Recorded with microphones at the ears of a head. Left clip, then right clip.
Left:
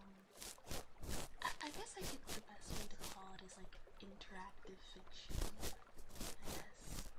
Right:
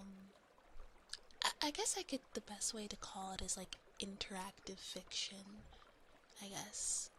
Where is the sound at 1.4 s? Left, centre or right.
Right.